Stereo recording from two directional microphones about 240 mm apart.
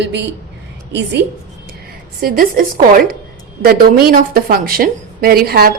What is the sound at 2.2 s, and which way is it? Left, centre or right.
A woman's voice, right.